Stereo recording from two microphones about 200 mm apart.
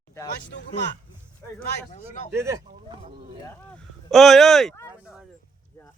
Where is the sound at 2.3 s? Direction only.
15° right (ahead or behind).